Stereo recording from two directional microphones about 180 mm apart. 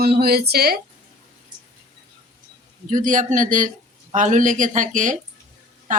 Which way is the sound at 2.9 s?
45° right (ahead or behind).